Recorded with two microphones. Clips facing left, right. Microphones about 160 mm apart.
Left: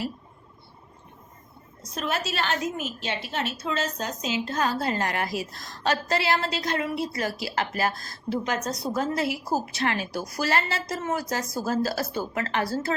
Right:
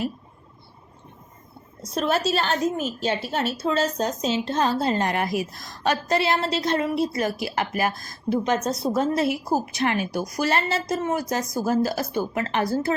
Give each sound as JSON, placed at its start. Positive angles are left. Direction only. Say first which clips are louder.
{"t": 2.0, "sound": "a woman's voice", "louder": "right 6 dB", "side_deg": -30}